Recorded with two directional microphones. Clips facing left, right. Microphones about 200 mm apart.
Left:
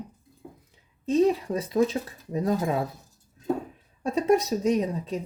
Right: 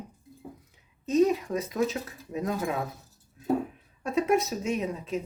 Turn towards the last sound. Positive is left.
turn(degrees=35)  # may be behind; listen again after turning